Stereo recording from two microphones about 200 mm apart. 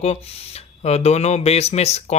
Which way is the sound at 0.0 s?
30° left (ahead or behind).